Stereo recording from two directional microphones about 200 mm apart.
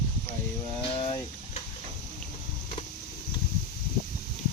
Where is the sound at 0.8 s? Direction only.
30° left (ahead or behind).